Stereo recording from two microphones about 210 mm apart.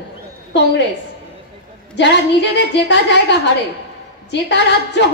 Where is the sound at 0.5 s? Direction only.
55° left (ahead or behind).